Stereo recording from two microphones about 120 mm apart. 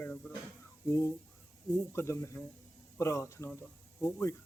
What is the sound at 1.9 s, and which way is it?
Speech, 20° left (ahead or behind).